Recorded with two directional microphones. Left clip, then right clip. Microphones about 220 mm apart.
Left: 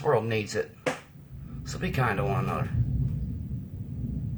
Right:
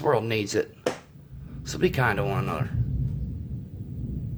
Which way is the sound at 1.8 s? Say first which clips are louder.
Right 4 dB; 45° right (ahead or behind).